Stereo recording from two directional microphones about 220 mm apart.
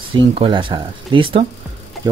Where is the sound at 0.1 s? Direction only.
25° right (ahead or behind).